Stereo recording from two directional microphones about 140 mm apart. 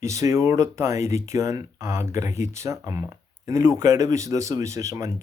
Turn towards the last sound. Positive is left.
turn(degrees=-20)  # may be behind; listen again after turning